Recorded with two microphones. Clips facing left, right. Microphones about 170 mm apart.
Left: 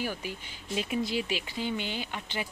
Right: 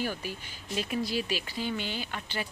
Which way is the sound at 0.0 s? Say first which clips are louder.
Right 1 dB; 15° left (ahead or behind).